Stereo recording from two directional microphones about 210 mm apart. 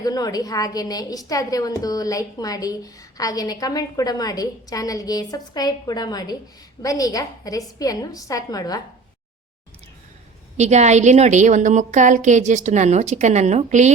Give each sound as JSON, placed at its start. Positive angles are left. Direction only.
{"t": 0.0, "sound": "a woman's voice", "side_deg": 20}
{"t": 10.6, "sound": "a woman's voice", "side_deg": -35}